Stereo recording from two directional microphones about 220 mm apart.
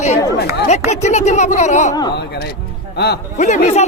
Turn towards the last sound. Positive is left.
turn(degrees=30)  # may be behind; listen again after turning